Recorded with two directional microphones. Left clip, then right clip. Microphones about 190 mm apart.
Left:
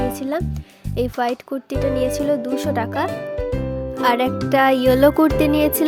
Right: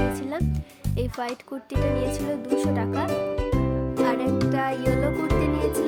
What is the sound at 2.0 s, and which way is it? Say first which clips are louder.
Speech: left 8 dB; 35° left (ahead or behind).